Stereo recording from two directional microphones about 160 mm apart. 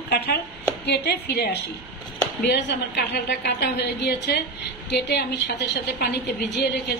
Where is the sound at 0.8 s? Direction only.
90° left.